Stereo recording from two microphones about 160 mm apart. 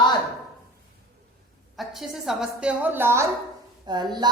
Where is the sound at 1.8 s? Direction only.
Centre (ahead or behind).